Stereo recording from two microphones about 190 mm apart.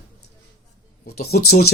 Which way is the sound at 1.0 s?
55° left (ahead or behind).